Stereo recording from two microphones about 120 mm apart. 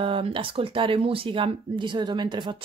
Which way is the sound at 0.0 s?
50° right (ahead or behind).